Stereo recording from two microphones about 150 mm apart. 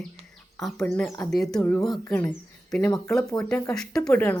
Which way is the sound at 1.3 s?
Centre (ahead or behind).